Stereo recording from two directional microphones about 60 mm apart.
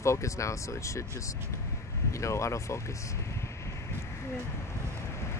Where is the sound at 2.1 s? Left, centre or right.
Left.